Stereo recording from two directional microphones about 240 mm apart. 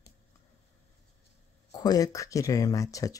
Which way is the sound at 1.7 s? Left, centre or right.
Centre.